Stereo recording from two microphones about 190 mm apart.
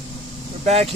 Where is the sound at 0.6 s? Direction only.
30° right (ahead or behind).